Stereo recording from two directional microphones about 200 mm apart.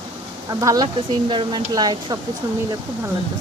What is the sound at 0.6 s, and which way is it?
Speech, 20° right (ahead or behind).